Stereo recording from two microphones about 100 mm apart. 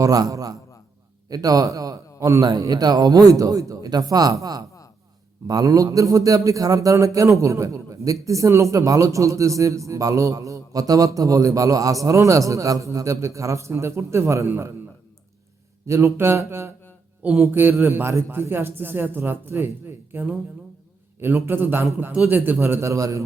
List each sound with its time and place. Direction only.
0.0 s a man's voice: 35° right (ahead or behind)
15.9 s a man's voice: 30° right (ahead or behind)